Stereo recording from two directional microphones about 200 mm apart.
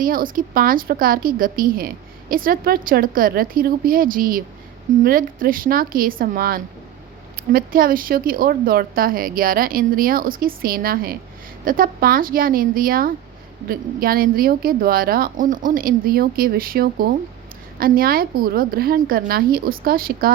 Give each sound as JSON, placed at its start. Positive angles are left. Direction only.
{"t": 0.0, "sound": "speech", "side_deg": -45}